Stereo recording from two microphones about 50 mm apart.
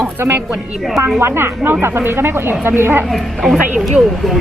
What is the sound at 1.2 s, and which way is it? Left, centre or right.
Speech, right.